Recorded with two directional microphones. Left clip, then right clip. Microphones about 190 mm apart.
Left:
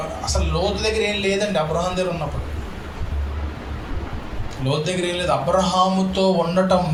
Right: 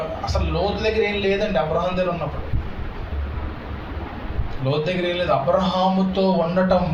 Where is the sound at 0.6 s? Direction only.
30° left (ahead or behind).